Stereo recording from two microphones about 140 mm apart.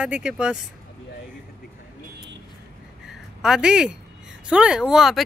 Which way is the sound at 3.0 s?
5° right (ahead or behind).